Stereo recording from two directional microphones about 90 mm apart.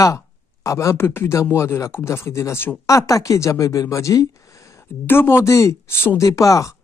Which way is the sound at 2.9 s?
40° left (ahead or behind).